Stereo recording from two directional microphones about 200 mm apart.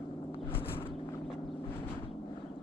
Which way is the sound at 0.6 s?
10° left (ahead or behind).